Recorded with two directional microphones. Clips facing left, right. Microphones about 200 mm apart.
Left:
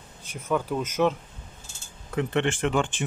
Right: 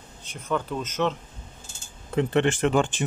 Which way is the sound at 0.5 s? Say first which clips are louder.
Left 2 dB; 10° left (ahead or behind).